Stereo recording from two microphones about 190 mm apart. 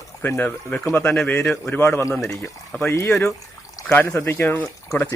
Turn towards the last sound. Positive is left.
turn(degrees=15)  # may be behind; listen again after turning